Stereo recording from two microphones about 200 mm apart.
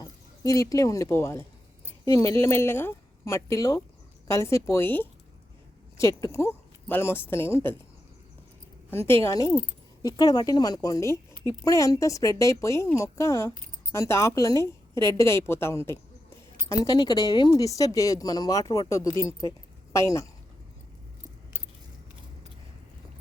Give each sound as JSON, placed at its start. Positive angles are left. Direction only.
{"t": 0.0, "sound": "speech", "side_deg": 15}
{"t": 8.9, "sound": "speech", "side_deg": 10}